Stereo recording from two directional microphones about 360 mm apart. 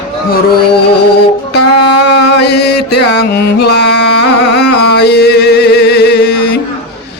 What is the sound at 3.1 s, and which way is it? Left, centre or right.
Carnatic music, left.